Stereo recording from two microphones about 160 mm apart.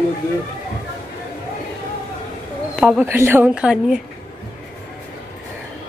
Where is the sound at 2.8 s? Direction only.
10° right (ahead or behind).